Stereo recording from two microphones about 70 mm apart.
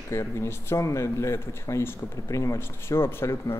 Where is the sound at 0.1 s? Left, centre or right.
Left.